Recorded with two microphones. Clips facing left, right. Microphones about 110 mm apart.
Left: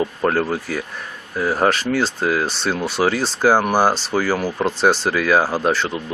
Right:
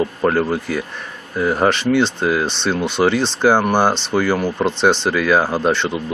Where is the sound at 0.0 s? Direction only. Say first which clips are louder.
Right 2 dB; centre (ahead or behind).